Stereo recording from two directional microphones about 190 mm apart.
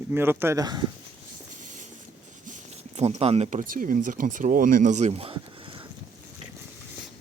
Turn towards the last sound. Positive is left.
turn(degrees=-25)  # may be behind; listen again after turning